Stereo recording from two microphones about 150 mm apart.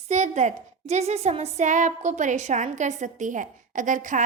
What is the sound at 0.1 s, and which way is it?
A woman's voice, 50° right (ahead or behind).